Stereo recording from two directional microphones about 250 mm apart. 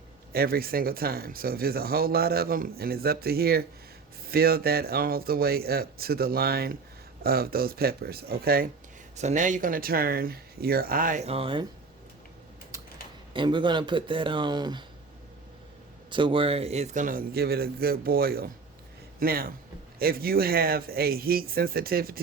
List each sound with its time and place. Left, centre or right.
0.3 s speech: right
12.7 s typing: centre
13.3 s speech: centre
16.0 s speech: centre; by 22.2 s right